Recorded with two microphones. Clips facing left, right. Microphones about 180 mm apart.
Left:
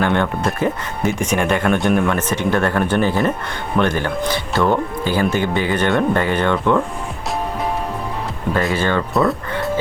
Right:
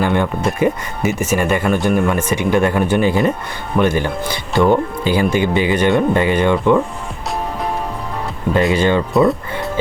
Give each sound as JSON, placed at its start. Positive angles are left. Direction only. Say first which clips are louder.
{"t": 0.0, "sound": "speech", "louder": "right 1 dB", "side_deg": -5}
{"t": 8.7, "sound": "speech", "louder": "right 4 dB", "side_deg": -15}